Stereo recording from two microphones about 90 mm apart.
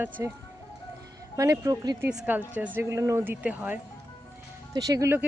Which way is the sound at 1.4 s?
40° right (ahead or behind).